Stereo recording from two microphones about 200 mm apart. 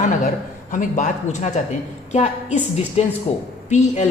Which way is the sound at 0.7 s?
40° left (ahead or behind).